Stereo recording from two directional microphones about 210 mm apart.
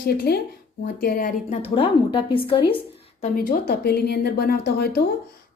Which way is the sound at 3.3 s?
40° left (ahead or behind).